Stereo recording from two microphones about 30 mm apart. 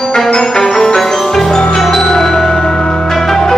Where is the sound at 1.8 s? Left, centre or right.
Centre.